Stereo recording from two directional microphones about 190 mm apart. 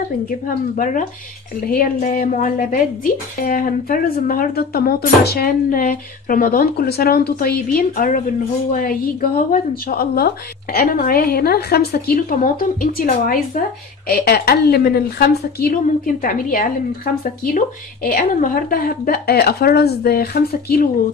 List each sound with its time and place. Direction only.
0.7 s a woman's voice: 45° left (ahead or behind)